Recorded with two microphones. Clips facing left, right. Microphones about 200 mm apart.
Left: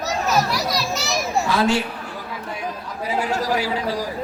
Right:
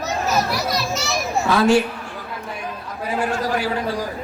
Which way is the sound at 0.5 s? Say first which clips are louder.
Right 1 dB; centre (ahead or behind).